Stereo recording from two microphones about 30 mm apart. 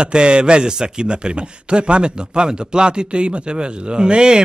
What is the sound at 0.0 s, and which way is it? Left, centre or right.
Speech, right.